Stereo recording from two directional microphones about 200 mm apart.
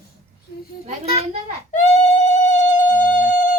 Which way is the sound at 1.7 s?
35° left (ahead or behind).